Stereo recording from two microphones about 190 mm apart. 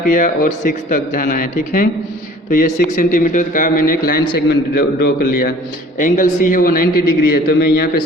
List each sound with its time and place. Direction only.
0.0 s a man's voice: 45° left (ahead or behind)